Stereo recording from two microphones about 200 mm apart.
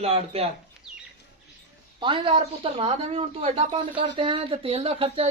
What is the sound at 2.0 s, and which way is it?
Speech, 25° right (ahead or behind).